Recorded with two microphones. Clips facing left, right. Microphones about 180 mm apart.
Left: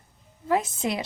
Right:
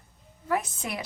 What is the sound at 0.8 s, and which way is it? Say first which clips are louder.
Speech: left 7 dB; 20° left (ahead or behind).